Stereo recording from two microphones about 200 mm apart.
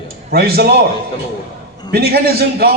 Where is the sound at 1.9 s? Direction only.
50° right (ahead or behind).